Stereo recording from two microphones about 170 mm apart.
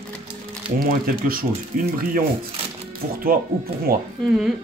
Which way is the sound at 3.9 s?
60° right (ahead or behind).